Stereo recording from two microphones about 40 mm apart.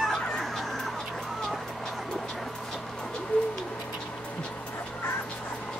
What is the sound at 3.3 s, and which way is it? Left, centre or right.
Bird, left.